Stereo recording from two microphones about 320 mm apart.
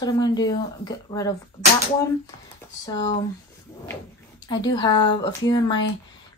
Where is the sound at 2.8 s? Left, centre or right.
Centre.